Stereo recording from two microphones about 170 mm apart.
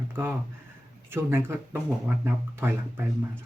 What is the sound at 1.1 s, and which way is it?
Speech, 15° right (ahead or behind).